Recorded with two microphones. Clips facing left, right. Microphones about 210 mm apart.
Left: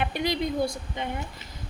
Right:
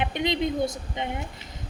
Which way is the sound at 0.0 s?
20° right (ahead or behind).